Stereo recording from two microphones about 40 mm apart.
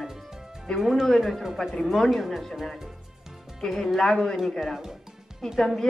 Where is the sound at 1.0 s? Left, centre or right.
Centre.